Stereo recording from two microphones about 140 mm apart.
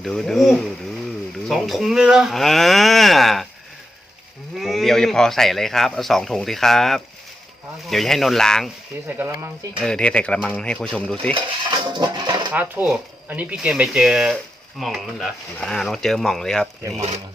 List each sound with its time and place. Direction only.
0.0 s speech: centre (ahead or behind)
4.5 s speech: centre (ahead or behind)
9.0 s speech: 15° right (ahead or behind)
9.8 s speech: 5° left (ahead or behind)
11.9 s a sound: 30° right (ahead or behind)
12.5 s speech: 10° right (ahead or behind); by 16.6 s 5° left (ahead or behind)